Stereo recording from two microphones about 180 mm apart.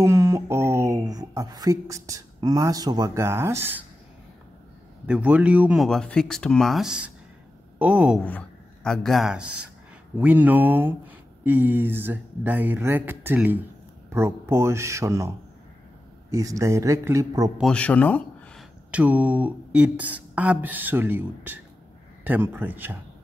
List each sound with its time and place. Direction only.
0.0 s a sound: 15° right (ahead or behind)
5.0 s speech: 5° right (ahead or behind)
8.2 s speech: 10° left (ahead or behind); by 17.5 s 20° right (ahead or behind)
17.6 s speech: 5° left (ahead or behind)
18.9 s speech: 10° right (ahead or behind)